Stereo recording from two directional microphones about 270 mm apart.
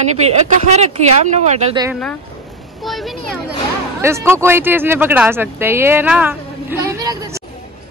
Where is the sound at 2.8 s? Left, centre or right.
Centre.